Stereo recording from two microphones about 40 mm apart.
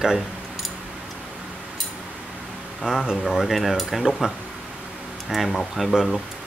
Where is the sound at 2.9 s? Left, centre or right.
Right.